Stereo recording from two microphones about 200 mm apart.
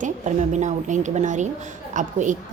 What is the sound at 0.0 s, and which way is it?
A woman's voice, 40° right (ahead or behind).